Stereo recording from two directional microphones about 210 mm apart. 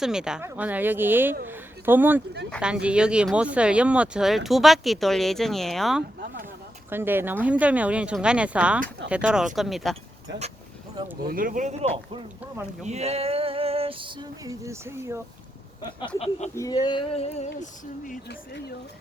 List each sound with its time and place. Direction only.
0.0 s speech: 5° right (ahead or behind)
6.9 s speech: 10° right (ahead or behind)
11.3 s speech: 40° right (ahead or behind)
12.8 s female singing: 30° right (ahead or behind); by 15.2 s 15° right (ahead or behind)
16.0 s a sound: 25° left (ahead or behind)
16.6 s a sound: 20° left (ahead or behind)
17.6 s speech: 40° left (ahead or behind)